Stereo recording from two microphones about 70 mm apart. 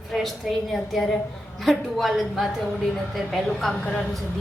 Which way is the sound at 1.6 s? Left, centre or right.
Centre.